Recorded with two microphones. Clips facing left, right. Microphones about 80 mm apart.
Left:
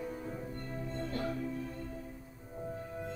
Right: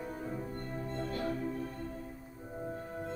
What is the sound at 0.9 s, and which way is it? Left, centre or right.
Music, right.